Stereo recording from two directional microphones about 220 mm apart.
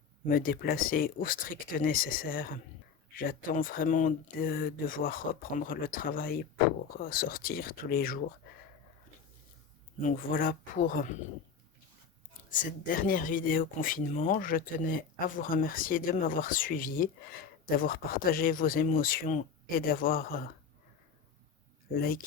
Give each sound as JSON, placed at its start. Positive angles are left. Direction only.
{"t": 0.3, "sound": "speech", "side_deg": 40}
{"t": 10.0, "sound": "speech", "side_deg": 40}
{"t": 12.3, "sound": "speech", "side_deg": 40}